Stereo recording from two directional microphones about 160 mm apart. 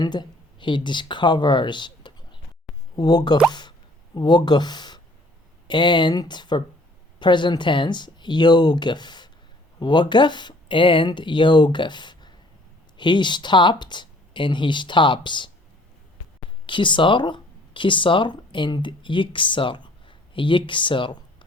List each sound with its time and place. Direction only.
0.0 s speech: 25° left (ahead or behind)
16.6 s speech: 30° left (ahead or behind)